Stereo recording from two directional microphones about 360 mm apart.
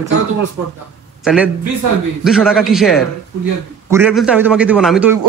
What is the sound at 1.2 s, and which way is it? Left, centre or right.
A man's voice, centre.